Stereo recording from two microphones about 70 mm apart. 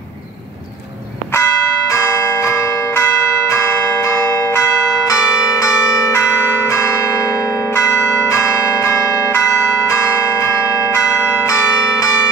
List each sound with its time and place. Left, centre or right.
1.3 s church bell: left
3.4 s change ringing: left
5.0 s change ringing: left
7.7 s change ringing: left